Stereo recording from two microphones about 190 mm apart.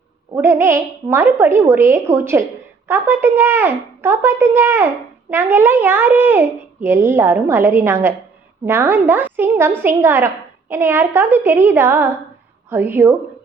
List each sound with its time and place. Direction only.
0.3 s a woman's voice: 15° right (ahead or behind)